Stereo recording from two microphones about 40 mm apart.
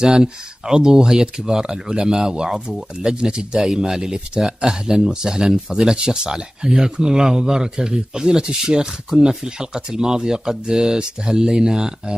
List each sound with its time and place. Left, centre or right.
0.0 s speech: centre